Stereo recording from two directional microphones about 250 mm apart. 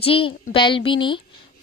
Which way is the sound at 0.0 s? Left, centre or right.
Left.